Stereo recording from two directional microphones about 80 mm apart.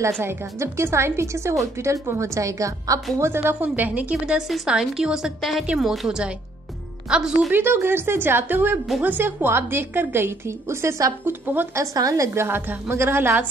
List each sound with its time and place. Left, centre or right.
0.2 s a woman's voice: right
3.2 s a woman's voice: right
4.4 s a woman's voice: centre
7.5 s a woman's voice: right
11.2 s a woman's voice: right
11.7 s a woman's voice: right
12.4 s a woman's voice: right